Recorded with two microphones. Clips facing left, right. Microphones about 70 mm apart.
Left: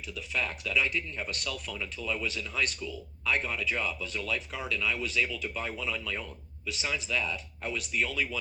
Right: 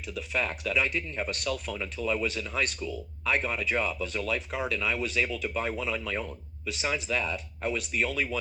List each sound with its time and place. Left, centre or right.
0.1 s speech: right